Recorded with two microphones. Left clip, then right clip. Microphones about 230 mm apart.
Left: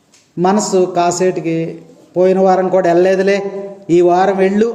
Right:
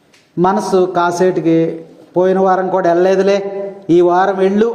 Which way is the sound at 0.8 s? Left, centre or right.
Centre.